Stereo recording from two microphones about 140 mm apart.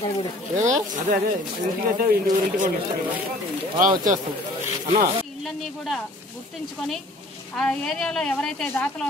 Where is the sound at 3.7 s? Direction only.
65° right (ahead or behind).